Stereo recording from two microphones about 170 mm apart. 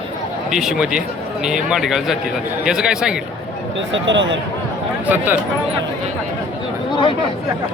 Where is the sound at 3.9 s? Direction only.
90° right.